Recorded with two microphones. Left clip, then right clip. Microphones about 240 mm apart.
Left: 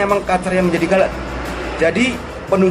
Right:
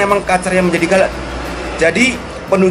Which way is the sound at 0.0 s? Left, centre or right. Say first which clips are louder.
Right 3 dB; centre.